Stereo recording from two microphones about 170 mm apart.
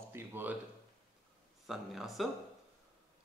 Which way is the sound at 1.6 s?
Centre (ahead or behind).